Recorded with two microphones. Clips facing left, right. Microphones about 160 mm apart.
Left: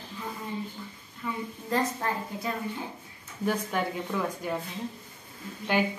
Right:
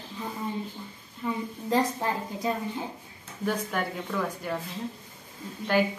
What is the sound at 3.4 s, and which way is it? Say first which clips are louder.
Speech: left 1 dB; 5° left (ahead or behind).